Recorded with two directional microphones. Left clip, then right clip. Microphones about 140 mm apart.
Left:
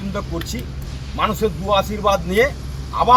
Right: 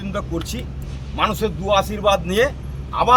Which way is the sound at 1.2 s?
30° right (ahead or behind).